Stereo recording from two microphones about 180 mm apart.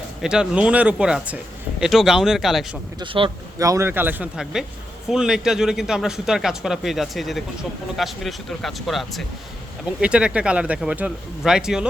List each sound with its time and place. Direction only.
0.2 s speech: 5° right (ahead or behind)
3.0 s speech: 30° right (ahead or behind)
3.6 s speech: 15° right (ahead or behind)